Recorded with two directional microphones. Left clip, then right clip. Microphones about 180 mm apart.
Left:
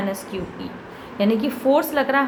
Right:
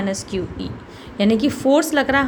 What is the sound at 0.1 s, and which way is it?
A woman's voice, 40° right (ahead or behind).